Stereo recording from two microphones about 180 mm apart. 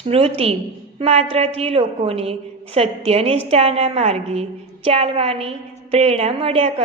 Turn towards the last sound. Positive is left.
turn(degrees=-30)  # may be behind; listen again after turning